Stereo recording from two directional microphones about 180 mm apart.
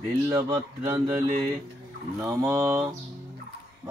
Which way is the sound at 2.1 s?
15° right (ahead or behind).